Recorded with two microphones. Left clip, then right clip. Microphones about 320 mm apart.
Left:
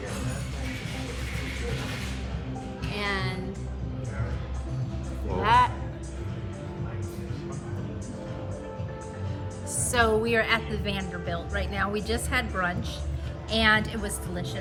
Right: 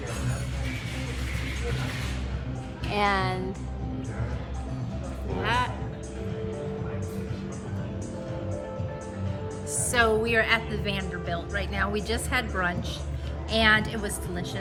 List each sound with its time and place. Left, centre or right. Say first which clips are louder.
2.9 s music: right 6 dB; centre
5.4 s music: left 6 dB; centre
9.9 s a woman's voice: even; centre